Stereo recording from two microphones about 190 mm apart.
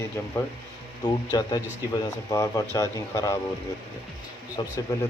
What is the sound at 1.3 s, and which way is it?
Speech, 20° left (ahead or behind).